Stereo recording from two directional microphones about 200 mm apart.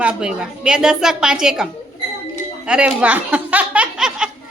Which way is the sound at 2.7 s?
5° right (ahead or behind).